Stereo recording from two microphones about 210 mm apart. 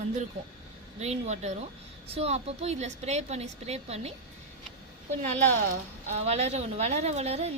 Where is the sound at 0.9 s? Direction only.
30° right (ahead or behind).